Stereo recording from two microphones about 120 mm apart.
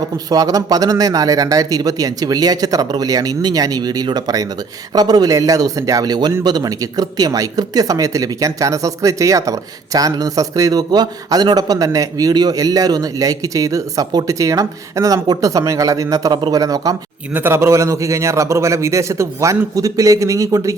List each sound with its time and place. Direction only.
0.3 s a man's voice: 30° right (ahead or behind)
17.3 s speech: 20° right (ahead or behind)